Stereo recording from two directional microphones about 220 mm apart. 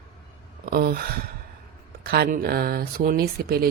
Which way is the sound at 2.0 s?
45° right (ahead or behind).